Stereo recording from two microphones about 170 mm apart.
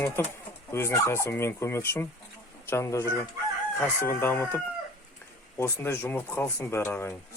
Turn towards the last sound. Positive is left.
turn(degrees=15)  # may be behind; listen again after turning